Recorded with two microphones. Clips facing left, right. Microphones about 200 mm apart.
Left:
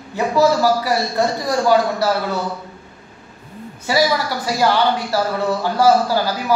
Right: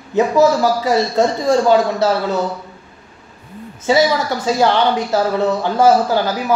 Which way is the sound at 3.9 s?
20° right (ahead or behind).